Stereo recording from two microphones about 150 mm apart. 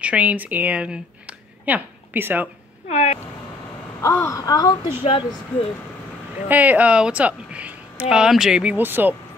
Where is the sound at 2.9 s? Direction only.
45° left (ahead or behind).